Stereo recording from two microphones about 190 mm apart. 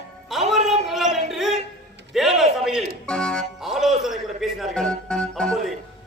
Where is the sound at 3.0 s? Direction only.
5° left (ahead or behind).